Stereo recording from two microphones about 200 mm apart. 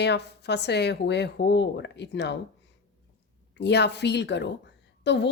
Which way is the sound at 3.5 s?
60° left (ahead or behind).